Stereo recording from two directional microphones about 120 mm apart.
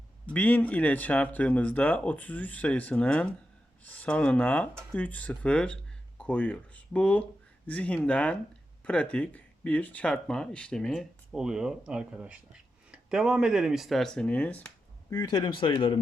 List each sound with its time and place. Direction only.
0.3 s speech: 15° left (ahead or behind)
15.1 s speech: 35° left (ahead or behind)